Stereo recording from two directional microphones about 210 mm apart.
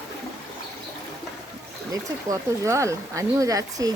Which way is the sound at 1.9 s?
15° right (ahead or behind).